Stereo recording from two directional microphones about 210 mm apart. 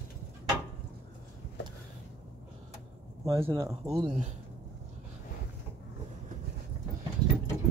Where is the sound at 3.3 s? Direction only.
15° right (ahead or behind).